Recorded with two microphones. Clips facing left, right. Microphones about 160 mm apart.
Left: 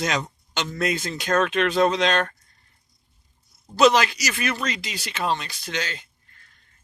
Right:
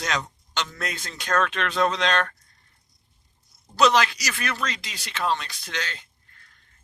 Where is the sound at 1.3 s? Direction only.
20° left (ahead or behind).